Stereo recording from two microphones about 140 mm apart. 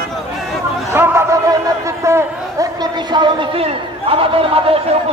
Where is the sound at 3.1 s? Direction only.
35° right (ahead or behind).